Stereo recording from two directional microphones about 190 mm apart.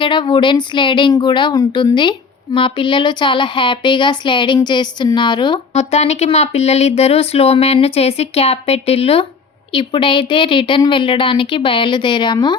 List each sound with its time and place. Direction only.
0.0 s speech: 25° left (ahead or behind)